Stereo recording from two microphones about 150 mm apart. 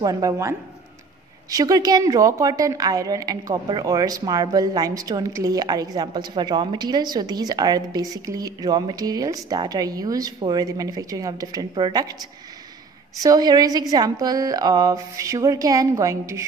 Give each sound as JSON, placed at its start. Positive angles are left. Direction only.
{"t": 0.0, "sound": "a woman's voice", "side_deg": -25}
{"t": 13.2, "sound": "a woman's voice", "side_deg": -25}